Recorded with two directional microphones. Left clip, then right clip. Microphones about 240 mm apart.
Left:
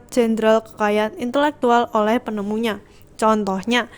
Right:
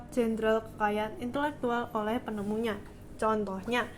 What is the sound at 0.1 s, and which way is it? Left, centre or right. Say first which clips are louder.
A woman's voice: left 12 dB; left.